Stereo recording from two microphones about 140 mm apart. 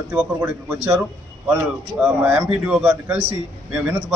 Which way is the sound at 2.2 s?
10° right (ahead or behind).